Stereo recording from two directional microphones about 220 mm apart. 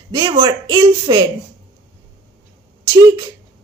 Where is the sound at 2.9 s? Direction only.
15° right (ahead or behind).